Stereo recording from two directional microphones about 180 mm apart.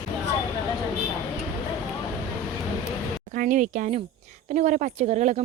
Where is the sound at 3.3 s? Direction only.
50° right (ahead or behind).